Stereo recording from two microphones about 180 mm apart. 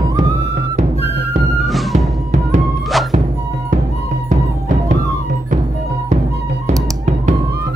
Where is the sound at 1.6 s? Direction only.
Centre (ahead or behind).